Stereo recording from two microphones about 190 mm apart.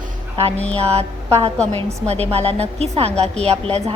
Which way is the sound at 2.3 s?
30° right (ahead or behind).